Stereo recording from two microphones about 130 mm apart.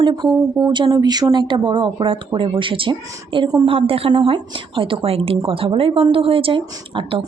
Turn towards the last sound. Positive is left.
turn(degrees=-45)  # may be behind; listen again after turning